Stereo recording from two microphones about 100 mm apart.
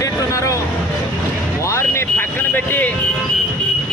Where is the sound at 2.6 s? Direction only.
15° left (ahead or behind).